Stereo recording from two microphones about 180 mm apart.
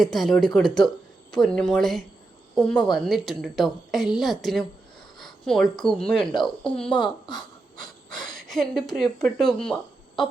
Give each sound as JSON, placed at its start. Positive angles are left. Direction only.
{"t": 0.0, "sound": "a woman's voice", "side_deg": 0}
{"t": 6.9, "sound": "a woman's voice", "side_deg": 25}
{"t": 7.3, "sound": "gasp", "side_deg": 5}
{"t": 9.2, "sound": "a woman's voice", "side_deg": 5}